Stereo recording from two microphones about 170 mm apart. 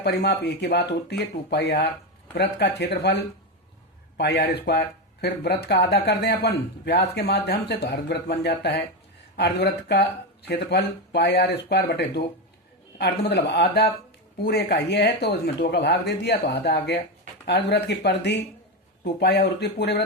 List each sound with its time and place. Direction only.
0.0 s speech: 75° left (ahead or behind); by 1.9 s 90° left
2.3 s speech: 75° left (ahead or behind)
4.2 s speech: 75° left (ahead or behind)
7.2 s speech: 70° left (ahead or behind); by 8.8 s 85° left
9.3 s speech: 70° left (ahead or behind); by 18.4 s 90° left
19.0 s speech: 75° left (ahead or behind)